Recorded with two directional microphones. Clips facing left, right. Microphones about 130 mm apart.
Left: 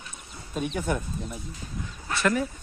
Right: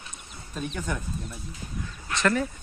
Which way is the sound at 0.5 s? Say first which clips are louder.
Left 4 dB; 10° left (ahead or behind).